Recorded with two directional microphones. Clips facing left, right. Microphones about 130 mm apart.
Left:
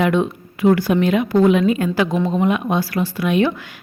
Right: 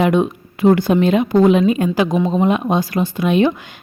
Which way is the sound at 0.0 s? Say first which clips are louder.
Right 2 dB; 15° right (ahead or behind).